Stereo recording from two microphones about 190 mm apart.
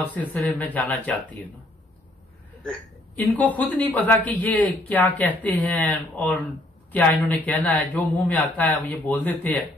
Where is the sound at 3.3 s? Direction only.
10° left (ahead or behind).